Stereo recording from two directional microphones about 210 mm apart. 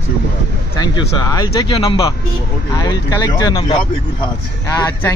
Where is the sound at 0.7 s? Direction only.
20° left (ahead or behind).